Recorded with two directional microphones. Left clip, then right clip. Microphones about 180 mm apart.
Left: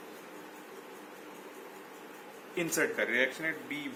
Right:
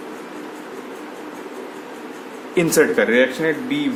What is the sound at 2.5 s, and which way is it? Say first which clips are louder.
Speech: right 15 dB; 55° right (ahead or behind).